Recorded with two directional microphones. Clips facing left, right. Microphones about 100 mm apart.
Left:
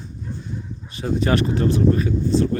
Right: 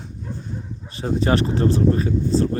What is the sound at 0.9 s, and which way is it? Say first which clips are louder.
Speech: even; 30° right (ahead or behind).